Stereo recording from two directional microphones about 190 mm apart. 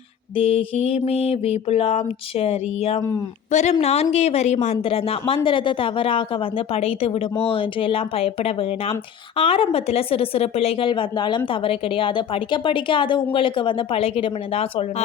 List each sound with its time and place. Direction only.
0.3 s speech: 30° left (ahead or behind)
3.0 s speech: 15° left (ahead or behind)
3.5 s speech: 35° left (ahead or behind)